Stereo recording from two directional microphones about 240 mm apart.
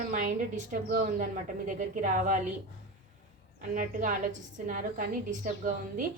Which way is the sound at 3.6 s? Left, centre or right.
Right.